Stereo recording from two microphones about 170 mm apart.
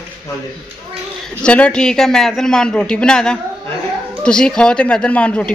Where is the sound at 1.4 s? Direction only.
5° left (ahead or behind).